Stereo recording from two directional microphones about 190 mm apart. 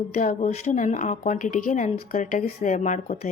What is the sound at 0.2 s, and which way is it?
A woman's voice, 40° left (ahead or behind).